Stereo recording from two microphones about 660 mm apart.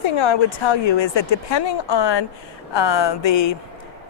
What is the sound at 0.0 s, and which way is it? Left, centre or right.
Speech, left.